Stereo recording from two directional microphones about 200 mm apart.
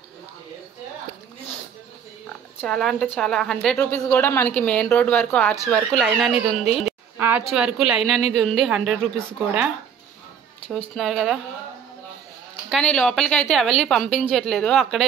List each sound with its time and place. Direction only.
2.6 s a woman's voice: centre (ahead or behind)
6.6 s a woman's voice: 35° left (ahead or behind)
7.2 s a sound: 10° right (ahead or behind)
7.4 s a woman's voice: 5° right (ahead or behind)
11.0 s a woman's voice: centre (ahead or behind)
12.6 s a woman's voice: centre (ahead or behind)